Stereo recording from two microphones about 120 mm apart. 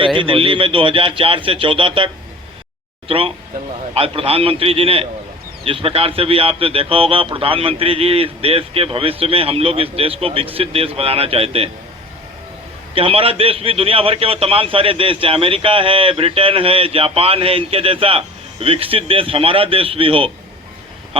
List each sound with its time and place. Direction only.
0.0 s a man's voice: 45° right (ahead or behind)
3.1 s a man's voice: 50° right (ahead or behind)
12.9 s a man's voice: 50° right (ahead or behind)